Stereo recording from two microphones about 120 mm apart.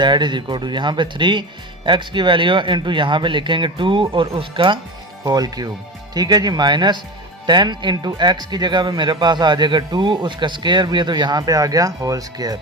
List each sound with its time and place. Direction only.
0.0 s speech: 40° right (ahead or behind)
5.2 s speech: 35° right (ahead or behind)